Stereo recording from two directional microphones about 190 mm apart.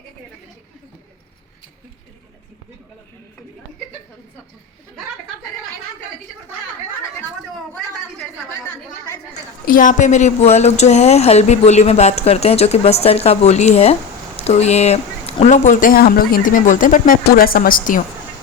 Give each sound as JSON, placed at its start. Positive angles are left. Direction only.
{"t": 9.3, "sound": "speech", "side_deg": 45}